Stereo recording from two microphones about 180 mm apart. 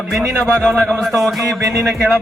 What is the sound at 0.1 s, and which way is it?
Speech, centre (ahead or behind).